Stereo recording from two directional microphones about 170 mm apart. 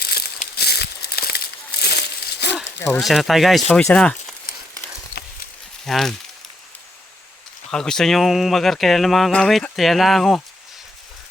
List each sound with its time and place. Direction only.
0.0 s a sound: 70° left (ahead or behind)
3.0 s speech: centre (ahead or behind)
5.8 s speech: centre (ahead or behind)
7.7 s speech: 5° left (ahead or behind)